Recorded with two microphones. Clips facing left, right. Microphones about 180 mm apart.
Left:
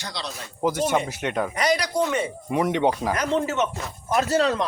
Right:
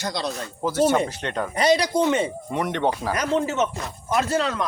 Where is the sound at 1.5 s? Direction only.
25° right (ahead or behind).